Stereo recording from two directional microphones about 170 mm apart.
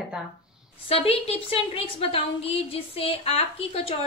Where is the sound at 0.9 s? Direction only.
35° left (ahead or behind).